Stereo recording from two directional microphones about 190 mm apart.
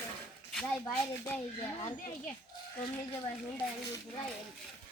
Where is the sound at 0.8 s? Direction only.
10° left (ahead or behind).